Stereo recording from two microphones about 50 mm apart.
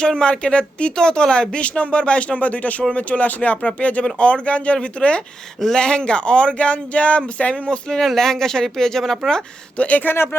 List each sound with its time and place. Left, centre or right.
0.0 s speech: centre
9.7 s speech: left